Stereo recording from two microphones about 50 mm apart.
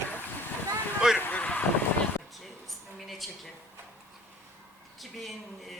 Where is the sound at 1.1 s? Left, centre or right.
Left.